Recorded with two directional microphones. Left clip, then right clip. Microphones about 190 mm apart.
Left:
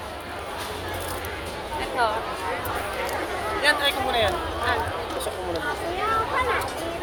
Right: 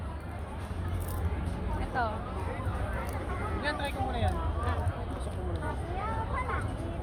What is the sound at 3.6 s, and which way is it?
Speech, 45° left (ahead or behind).